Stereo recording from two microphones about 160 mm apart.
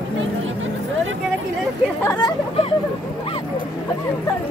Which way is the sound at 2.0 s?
20° left (ahead or behind).